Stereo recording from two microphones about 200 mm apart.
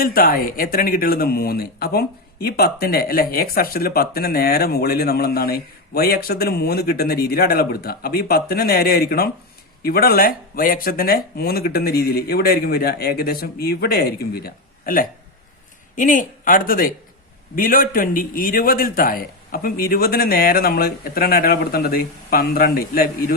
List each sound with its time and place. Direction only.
0.0 s speech: 45° left (ahead or behind)